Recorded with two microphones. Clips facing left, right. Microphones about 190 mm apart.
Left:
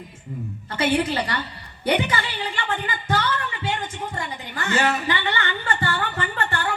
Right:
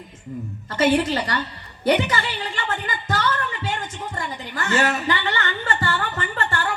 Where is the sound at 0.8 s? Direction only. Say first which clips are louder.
Right 3 dB; 40° right (ahead or behind).